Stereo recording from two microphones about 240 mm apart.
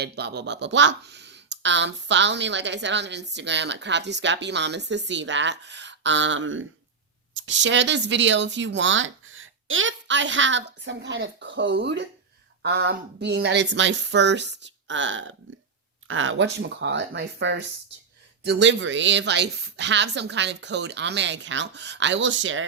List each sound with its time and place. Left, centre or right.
0.0 s speech: right